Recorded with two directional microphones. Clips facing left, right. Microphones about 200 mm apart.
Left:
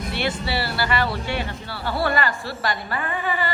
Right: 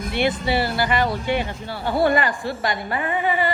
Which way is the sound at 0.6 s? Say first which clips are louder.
Even; 15° right (ahead or behind).